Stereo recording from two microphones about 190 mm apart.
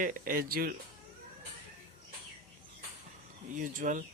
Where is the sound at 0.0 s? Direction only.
45° right (ahead or behind).